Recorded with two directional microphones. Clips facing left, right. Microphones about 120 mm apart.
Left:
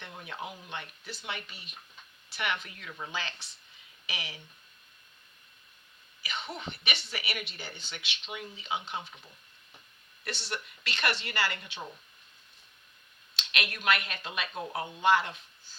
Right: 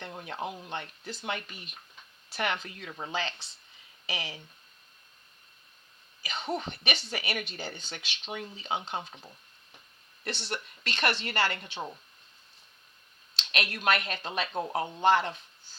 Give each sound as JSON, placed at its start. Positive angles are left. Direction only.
{"t": 0.0, "sound": "speech", "side_deg": -40}
{"t": 6.2, "sound": "speech", "side_deg": -35}
{"t": 10.5, "sound": "speech", "side_deg": -35}
{"t": 13.3, "sound": "speech", "side_deg": -35}